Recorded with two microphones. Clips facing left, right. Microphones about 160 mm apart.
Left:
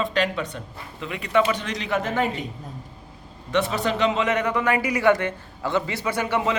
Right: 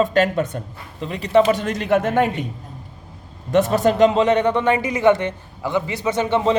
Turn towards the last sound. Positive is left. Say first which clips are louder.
# right 5 dB
turn(degrees=-25)  # may be behind; listen again after turning